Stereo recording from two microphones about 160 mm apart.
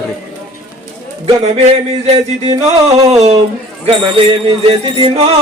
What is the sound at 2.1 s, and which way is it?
Speech, 40° right (ahead or behind).